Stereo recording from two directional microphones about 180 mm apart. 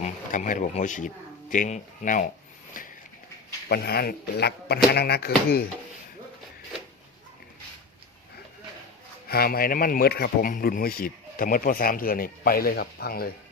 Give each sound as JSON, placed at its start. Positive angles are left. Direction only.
{"t": 0.0, "sound": "speech", "side_deg": 45}
{"t": 2.8, "sound": "a sound", "side_deg": 50}
{"t": 3.7, "sound": "speech", "side_deg": 60}
{"t": 9.2, "sound": "speech", "side_deg": 60}